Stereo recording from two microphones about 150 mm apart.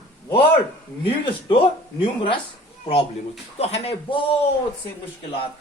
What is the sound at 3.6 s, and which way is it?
Speech, 45° left (ahead or behind).